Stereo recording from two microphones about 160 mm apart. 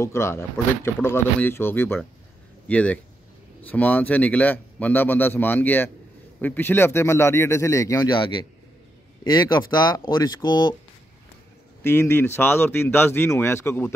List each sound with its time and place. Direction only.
0.0 s a man's voice: 15° left (ahead or behind)
8.2 s a man's voice: 30° left (ahead or behind)
11.8 s a man's voice: 15° left (ahead or behind)